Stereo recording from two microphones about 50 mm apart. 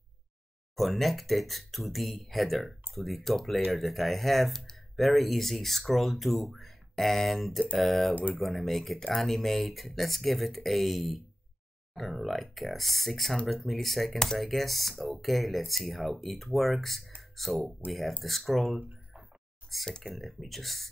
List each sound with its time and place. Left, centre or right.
0.7 s speech: centre
8.1 s speech: right
8.4 s speech: centre
17.2 s a sound: centre
17.7 s speech: centre
20.0 s speech: centre